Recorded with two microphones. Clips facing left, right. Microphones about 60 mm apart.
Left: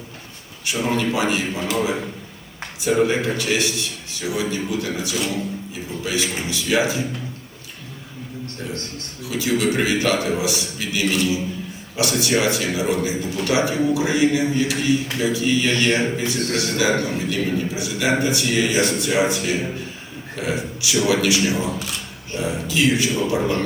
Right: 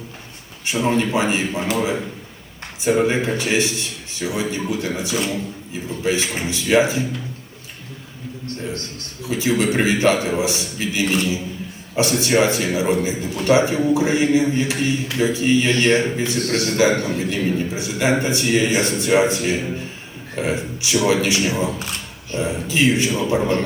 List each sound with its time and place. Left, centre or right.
0.6 s a man's voice: right
9.3 s a man's voice: right